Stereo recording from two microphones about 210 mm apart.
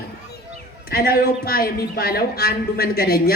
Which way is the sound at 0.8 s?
45° left (ahead or behind).